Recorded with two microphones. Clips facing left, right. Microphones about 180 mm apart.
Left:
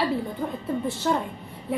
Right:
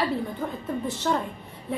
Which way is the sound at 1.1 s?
5° left (ahead or behind).